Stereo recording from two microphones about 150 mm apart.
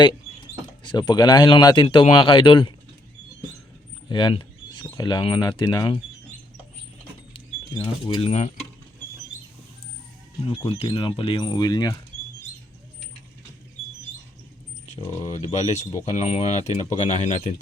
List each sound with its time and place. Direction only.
0.8 s speech: 30° left (ahead or behind)
4.1 s speech: 30° left (ahead or behind)
8.0 s speech: 30° left (ahead or behind)
8.3 s speech: 50° left (ahead or behind)
10.4 s speech: 35° left (ahead or behind)
15.4 s speech: 50° left (ahead or behind)